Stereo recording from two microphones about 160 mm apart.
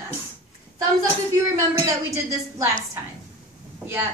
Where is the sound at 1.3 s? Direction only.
20° right (ahead or behind).